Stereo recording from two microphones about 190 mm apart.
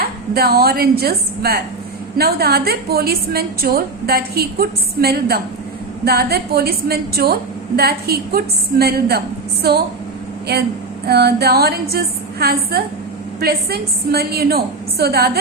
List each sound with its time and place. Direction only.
0.0 s a woman's voice: 55° right (ahead or behind)
11.0 s a woman's voice: 55° right (ahead or behind)